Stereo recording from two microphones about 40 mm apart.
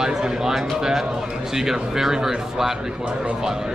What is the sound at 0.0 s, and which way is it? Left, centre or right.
Speech, centre.